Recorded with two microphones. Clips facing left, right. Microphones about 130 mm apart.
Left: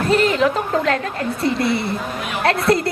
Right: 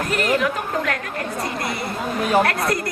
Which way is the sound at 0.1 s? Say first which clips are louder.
Left 5 dB; 25° left (ahead or behind).